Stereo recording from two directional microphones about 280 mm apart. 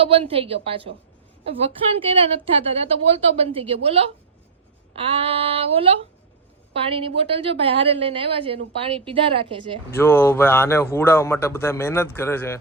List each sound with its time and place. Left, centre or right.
0.0 s a woman's voice: right
2.1 s a woman's voice: centre
9.9 s a man's voice: centre